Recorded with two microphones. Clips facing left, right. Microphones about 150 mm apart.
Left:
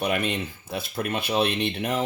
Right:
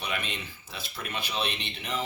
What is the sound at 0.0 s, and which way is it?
Speech, 50° left (ahead or behind).